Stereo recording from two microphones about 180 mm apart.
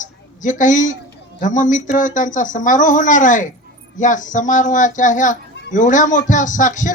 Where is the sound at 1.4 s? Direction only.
45° left (ahead or behind).